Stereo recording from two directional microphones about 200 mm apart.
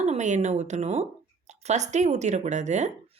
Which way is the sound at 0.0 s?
35° right (ahead or behind).